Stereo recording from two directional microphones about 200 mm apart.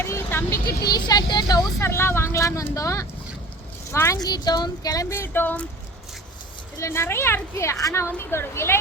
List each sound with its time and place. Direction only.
0.0 s vehicle: 10° left (ahead or behind)
0.9 s a woman's voice: 20° left (ahead or behind)
6.7 s a woman's voice: 15° left (ahead or behind)